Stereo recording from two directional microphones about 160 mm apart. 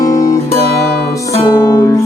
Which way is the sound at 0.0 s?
20° left (ahead or behind).